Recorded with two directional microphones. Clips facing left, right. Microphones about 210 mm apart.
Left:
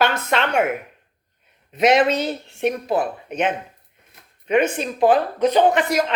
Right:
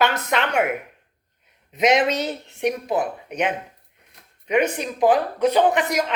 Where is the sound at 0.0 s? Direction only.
25° left (ahead or behind).